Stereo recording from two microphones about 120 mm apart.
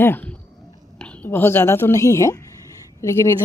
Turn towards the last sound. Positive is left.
turn(degrees=25)  # may be behind; listen again after turning